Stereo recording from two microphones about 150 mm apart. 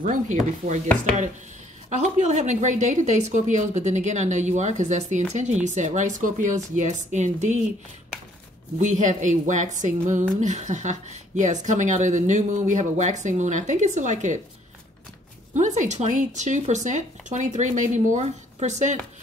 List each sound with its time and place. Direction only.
0.0 s speech: 60° right (ahead or behind)
2.1 s speech: 50° right (ahead or behind)
8.7 s speech: 55° right (ahead or behind)
15.5 s speech: 55° right (ahead or behind)